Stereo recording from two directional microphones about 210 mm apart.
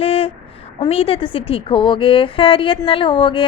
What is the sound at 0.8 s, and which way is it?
A woman's voice, 30° left (ahead or behind).